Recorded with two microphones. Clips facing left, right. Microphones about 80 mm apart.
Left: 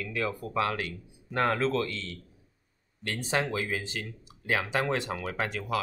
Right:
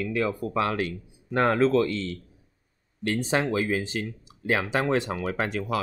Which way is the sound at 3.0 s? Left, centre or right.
Right.